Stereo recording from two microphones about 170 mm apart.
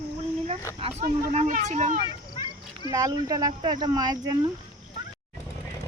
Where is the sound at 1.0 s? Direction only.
50° right (ahead or behind).